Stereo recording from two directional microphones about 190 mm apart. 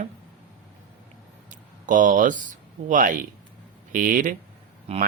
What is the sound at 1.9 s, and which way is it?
Speech, 45° right (ahead or behind).